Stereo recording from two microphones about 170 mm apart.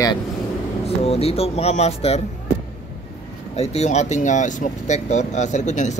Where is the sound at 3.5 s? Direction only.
40° left (ahead or behind).